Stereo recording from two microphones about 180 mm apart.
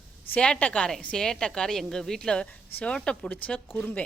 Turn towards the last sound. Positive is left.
turn(degrees=10)  # may be behind; listen again after turning